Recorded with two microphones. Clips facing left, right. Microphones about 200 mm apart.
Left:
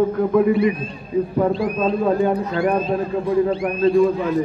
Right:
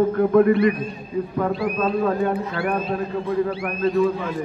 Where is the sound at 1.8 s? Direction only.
25° left (ahead or behind).